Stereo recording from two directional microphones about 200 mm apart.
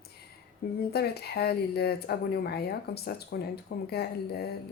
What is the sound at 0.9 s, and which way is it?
Speech, 55° left (ahead or behind).